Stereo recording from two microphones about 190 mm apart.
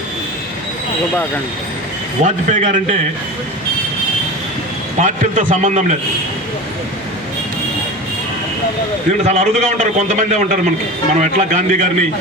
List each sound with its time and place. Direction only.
2.2 s a man's voice: 40° right (ahead or behind)
4.9 s a man's voice: 40° right (ahead or behind)
9.2 s a man's voice: 35° right (ahead or behind)